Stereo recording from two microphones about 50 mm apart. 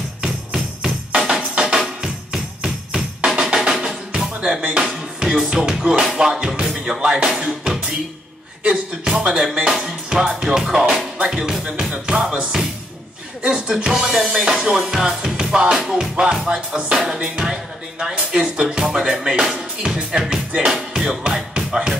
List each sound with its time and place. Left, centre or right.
0.2 s music: centre
2.6 s jingle bell: centre
3.3 s drum: centre
4.3 s music: centre